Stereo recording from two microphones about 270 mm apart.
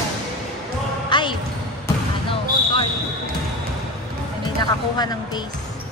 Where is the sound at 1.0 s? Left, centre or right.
Centre.